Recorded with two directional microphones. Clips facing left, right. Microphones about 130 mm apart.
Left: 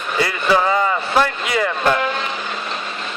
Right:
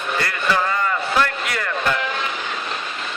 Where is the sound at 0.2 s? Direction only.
10° left (ahead or behind).